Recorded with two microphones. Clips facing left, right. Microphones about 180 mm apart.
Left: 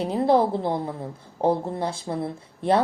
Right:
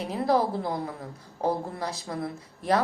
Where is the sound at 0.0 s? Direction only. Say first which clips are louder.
Left 5 dB; 30° left (ahead or behind).